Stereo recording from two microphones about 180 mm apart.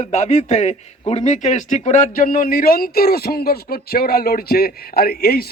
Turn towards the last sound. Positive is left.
turn(degrees=60)  # may be behind; listen again after turning